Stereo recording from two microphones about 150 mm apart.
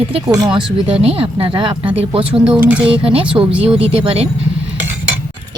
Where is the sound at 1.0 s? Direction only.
40° right (ahead or behind).